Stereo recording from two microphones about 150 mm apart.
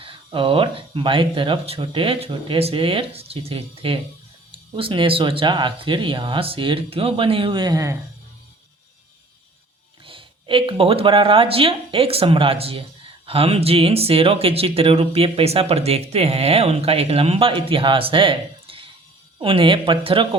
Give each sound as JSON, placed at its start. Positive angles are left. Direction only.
{"t": 0.0, "sound": "speech", "side_deg": -35}
{"t": 10.1, "sound": "speech", "side_deg": -35}